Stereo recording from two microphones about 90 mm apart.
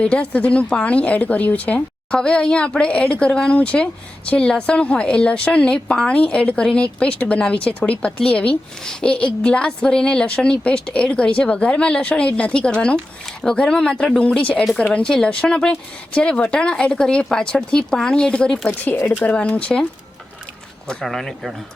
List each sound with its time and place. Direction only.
0.0 s a woman's voice: 10° left (ahead or behind)
18.7 s a woman's voice: 25° left (ahead or behind)
20.8 s speech: 5° left (ahead or behind)